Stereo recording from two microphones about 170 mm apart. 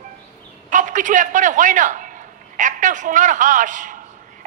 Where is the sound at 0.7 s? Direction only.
50° right (ahead or behind).